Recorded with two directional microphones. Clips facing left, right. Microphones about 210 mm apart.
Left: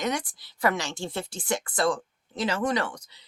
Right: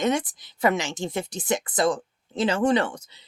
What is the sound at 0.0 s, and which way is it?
Speech, 25° right (ahead or behind).